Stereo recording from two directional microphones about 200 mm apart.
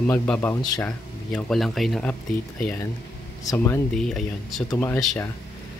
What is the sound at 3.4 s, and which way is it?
Speech, 15° left (ahead or behind).